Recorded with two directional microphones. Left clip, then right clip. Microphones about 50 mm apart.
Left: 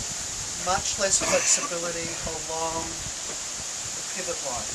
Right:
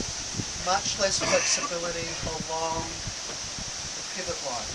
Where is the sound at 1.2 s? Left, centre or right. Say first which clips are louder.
Right 1 dB; centre.